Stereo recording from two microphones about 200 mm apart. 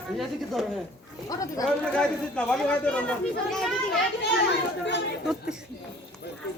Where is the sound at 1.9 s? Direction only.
5° left (ahead or behind).